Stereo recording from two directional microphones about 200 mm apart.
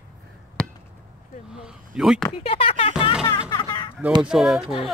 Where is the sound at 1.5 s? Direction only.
5° right (ahead or behind).